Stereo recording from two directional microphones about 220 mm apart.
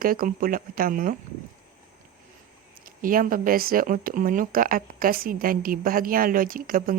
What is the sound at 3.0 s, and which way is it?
Speech, 40° right (ahead or behind).